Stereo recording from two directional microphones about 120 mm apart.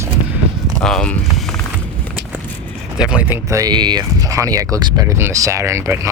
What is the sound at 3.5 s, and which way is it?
Speech, 35° right (ahead or behind).